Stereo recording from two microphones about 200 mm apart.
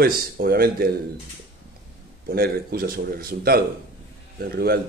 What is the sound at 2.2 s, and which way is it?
Speech, 50° right (ahead or behind).